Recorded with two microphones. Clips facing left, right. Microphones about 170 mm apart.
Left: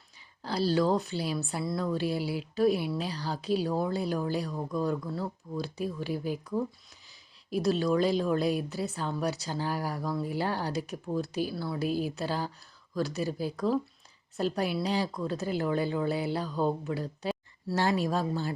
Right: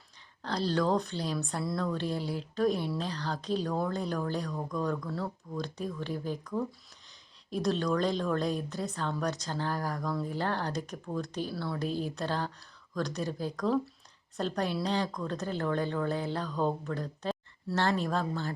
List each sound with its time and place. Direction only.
0.4 s a woman's voice: 5° left (ahead or behind)